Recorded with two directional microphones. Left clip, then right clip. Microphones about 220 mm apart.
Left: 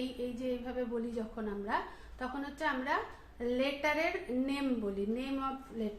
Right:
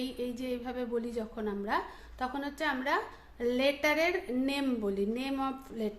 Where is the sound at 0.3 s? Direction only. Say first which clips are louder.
Right 1 dB; 50° right (ahead or behind).